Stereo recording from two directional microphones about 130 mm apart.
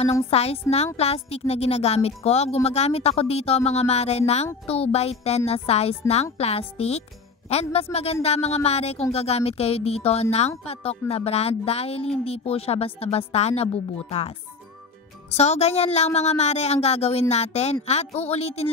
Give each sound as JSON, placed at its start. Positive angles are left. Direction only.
{"t": 0.0, "sound": "a woman's voice", "side_deg": 55}
{"t": 15.3, "sound": "a woman's voice", "side_deg": 55}